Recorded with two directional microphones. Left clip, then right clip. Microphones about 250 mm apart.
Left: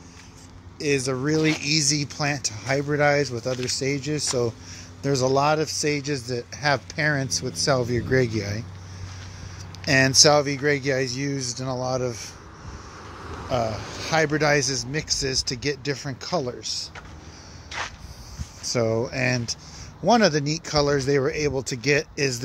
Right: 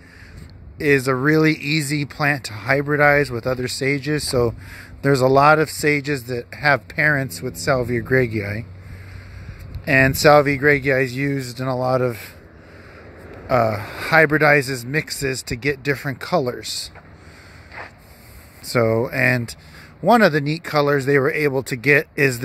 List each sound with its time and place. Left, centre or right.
0.8 s speech: centre
9.8 s speech: centre
13.5 s speech: centre
16.6 s speech: right
18.7 s speech: centre